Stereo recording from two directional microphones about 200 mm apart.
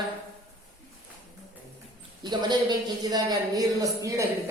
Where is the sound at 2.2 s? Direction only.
20° right (ahead or behind).